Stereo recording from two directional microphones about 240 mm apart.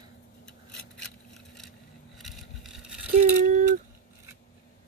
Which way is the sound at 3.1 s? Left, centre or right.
Right.